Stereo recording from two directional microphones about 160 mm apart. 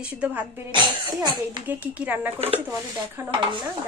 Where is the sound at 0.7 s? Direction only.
25° right (ahead or behind).